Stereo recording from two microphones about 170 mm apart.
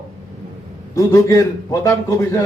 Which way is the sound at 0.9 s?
20° left (ahead or behind).